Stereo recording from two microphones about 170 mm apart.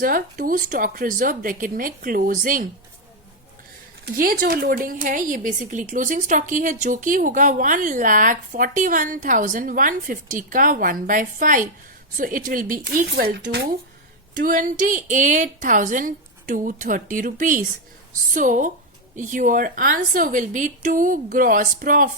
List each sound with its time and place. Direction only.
0.0 s speech: 55° right (ahead or behind)
4.0 s speech: 60° right (ahead or behind)
14.3 s speech: 50° right (ahead or behind)